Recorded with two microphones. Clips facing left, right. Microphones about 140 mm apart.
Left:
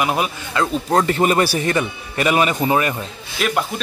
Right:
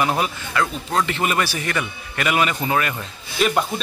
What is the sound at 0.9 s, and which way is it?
A man's voice, 40° left (ahead or behind).